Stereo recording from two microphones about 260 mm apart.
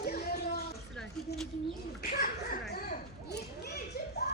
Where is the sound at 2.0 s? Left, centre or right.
Left.